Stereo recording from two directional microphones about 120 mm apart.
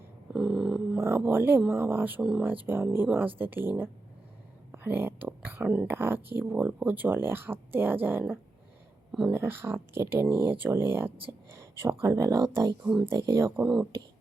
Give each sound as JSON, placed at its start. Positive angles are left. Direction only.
{"t": 0.3, "sound": "dog", "side_deg": -5}
{"t": 0.9, "sound": "speech", "side_deg": -20}
{"t": 9.3, "sound": "speech", "side_deg": -20}
{"t": 12.8, "sound": "speech", "side_deg": -5}
{"t": 13.1, "sound": "speech", "side_deg": -25}